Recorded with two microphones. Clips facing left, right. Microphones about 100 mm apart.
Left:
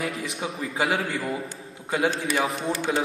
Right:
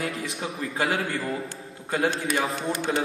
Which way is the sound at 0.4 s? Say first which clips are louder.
Left 1 dB; 5° left (ahead or behind).